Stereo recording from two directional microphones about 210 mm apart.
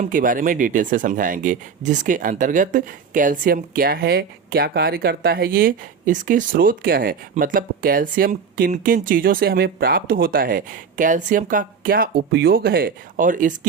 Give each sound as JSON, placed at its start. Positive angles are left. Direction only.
{"t": 0.0, "sound": "speech", "side_deg": -40}